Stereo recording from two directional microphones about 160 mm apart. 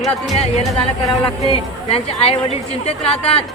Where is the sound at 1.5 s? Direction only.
40° left (ahead or behind).